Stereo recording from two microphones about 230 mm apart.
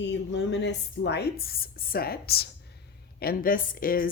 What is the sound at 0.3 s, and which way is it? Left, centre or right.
A woman's voice, left.